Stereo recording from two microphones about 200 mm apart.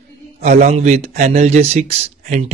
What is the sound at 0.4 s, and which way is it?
Speech, 35° right (ahead or behind).